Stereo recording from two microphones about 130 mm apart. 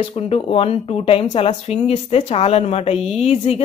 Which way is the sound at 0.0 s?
45° left (ahead or behind).